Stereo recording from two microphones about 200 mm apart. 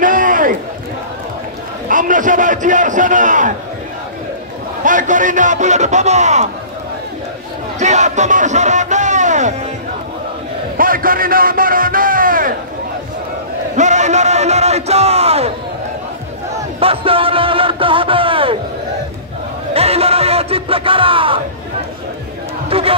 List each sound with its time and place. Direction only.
0.0 s a sound: 40° right (ahead or behind)
1.9 s a sound: 40° right (ahead or behind)
4.8 s a man's voice: 40° right (ahead or behind)
7.8 s music: 35° right (ahead or behind)
10.8 s a man's voice: 45° right (ahead or behind)
13.7 s a sound: 35° right (ahead or behind)
16.8 s music: 30° right (ahead or behind)
19.7 s music: 30° right (ahead or behind)
22.7 s music: 30° right (ahead or behind)